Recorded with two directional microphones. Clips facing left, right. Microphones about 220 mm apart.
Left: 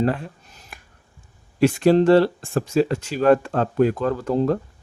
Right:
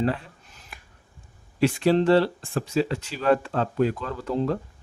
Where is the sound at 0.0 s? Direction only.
45° left (ahead or behind).